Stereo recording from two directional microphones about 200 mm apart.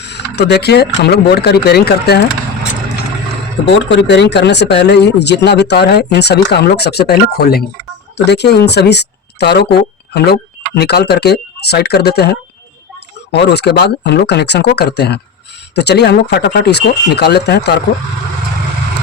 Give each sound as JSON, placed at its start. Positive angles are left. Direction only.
{"t": 0.0, "sound": "speech", "side_deg": 55}
{"t": 3.8, "sound": "speech", "side_deg": 60}